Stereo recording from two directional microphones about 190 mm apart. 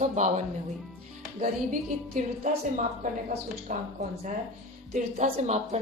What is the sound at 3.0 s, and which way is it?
Speech, 40° right (ahead or behind).